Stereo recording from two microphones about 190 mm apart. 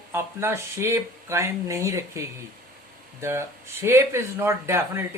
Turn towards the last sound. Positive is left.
turn(degrees=-15)  # may be behind; listen again after turning